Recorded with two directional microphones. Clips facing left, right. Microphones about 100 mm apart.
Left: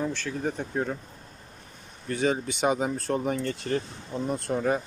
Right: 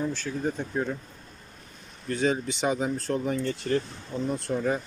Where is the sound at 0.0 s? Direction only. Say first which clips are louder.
Even; 60° left (ahead or behind).